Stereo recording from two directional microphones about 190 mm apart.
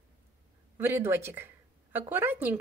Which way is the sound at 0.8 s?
10° right (ahead or behind).